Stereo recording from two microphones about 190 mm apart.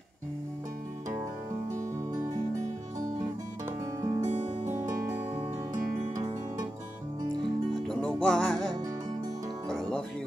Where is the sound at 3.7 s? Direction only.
15° right (ahead or behind).